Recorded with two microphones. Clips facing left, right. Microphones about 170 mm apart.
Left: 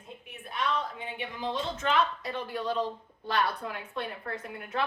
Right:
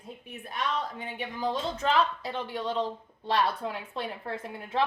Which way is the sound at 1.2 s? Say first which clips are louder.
Right 3 dB; 40° right (ahead or behind).